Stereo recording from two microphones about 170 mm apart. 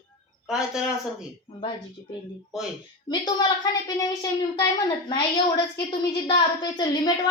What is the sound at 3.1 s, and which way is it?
A woman's voice, 25° left (ahead or behind).